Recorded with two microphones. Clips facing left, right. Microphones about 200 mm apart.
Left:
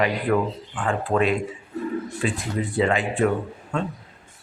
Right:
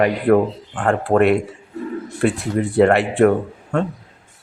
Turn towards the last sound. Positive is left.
turn(degrees=-65)  # may be behind; listen again after turning